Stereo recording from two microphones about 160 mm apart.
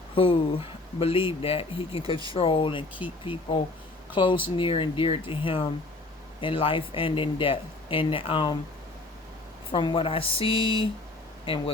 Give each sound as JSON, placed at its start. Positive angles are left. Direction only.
{"t": 0.2, "sound": "speech", "side_deg": 35}
{"t": 4.1, "sound": "speech", "side_deg": 30}
{"t": 9.7, "sound": "speech", "side_deg": 30}